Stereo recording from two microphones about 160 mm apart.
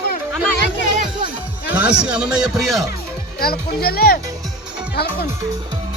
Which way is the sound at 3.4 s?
70° left (ahead or behind).